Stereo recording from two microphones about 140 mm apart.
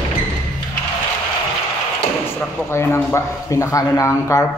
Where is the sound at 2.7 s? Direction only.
20° left (ahead or behind).